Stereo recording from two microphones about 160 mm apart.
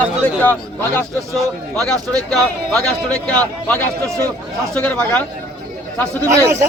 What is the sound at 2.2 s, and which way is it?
Speech, 5° left (ahead or behind).